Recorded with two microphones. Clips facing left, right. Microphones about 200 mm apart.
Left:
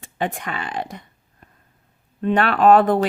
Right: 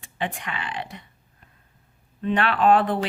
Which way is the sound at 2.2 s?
45° left (ahead or behind).